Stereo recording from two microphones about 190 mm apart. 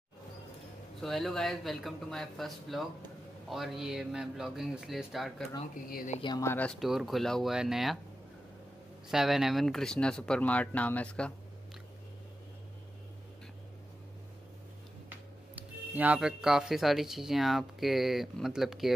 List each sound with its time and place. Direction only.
1.0 s speech: centre (ahead or behind)
5.9 s speech: 50° left (ahead or behind)
6.1 s speech: 25° left (ahead or behind)
6.4 s speech: 10° left (ahead or behind)
9.1 s speech: centre (ahead or behind)
15.5 s speech: 10° right (ahead or behind)